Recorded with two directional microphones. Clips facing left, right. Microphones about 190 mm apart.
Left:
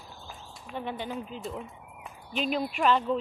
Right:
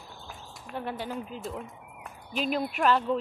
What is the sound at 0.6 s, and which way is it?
Speech, 5° right (ahead or behind).